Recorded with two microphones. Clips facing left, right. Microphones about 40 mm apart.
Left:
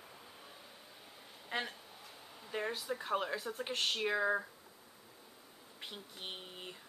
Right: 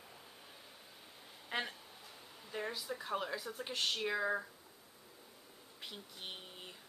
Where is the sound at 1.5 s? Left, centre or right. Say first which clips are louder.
Left 1 dB; centre.